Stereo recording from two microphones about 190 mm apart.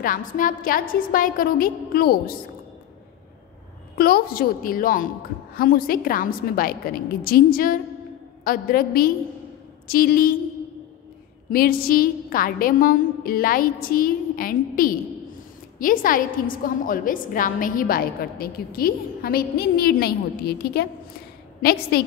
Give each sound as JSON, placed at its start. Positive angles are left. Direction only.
{"t": 0.0, "sound": "a woman's voice", "side_deg": 45}
{"t": 3.9, "sound": "a woman's voice", "side_deg": 50}
{"t": 11.5, "sound": "a woman's voice", "side_deg": 50}